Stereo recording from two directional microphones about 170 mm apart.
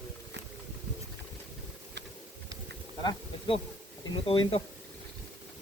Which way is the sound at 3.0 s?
30° left (ahead or behind).